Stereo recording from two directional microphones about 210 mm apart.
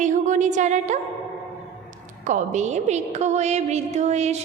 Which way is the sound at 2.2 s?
35° right (ahead or behind).